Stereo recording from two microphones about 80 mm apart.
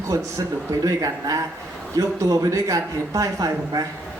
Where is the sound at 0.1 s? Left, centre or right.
Right.